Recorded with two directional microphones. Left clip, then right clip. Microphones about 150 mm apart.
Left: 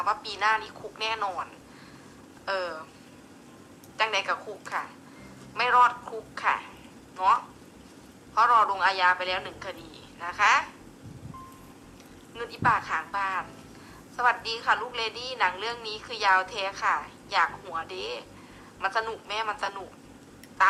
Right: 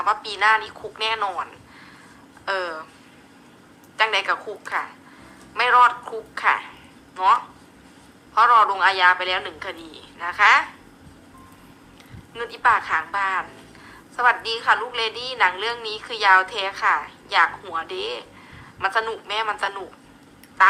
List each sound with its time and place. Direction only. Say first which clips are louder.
0.1 s a man's voice: right 8 dB; 15° right (ahead or behind)
3.9 s a woman's voice: right 6 dB; 15° right (ahead or behind)
12.3 s a woman's voice: right 6 dB; 20° right (ahead or behind)
16.8 s a woman's voice: right 7 dB; 30° right (ahead or behind)